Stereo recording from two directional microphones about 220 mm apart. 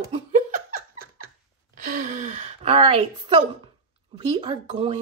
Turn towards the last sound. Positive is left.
turn(degrees=-30)  # may be behind; listen again after turning